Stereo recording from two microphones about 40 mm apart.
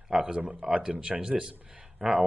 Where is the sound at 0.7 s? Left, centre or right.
Right.